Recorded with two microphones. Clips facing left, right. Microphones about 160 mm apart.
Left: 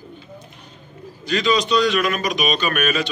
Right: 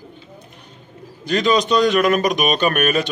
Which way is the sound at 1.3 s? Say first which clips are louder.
Right 2 dB; 50° right (ahead or behind).